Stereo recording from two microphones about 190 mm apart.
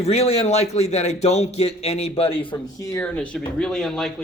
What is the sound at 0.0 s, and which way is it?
A man's voice, 35° left (ahead or behind).